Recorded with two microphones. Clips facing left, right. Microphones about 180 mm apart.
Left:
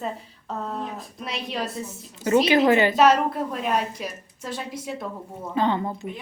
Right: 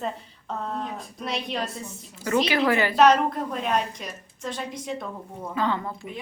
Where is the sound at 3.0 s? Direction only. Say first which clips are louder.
Even; 5° left (ahead or behind).